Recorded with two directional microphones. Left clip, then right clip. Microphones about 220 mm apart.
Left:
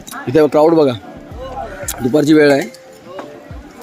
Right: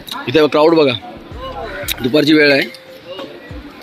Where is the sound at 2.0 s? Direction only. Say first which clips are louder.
Left 1 dB; 10° left (ahead or behind).